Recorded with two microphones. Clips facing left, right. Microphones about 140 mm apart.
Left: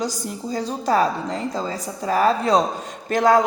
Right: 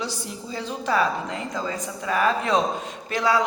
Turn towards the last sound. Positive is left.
turn(degrees=50)  # may be behind; listen again after turning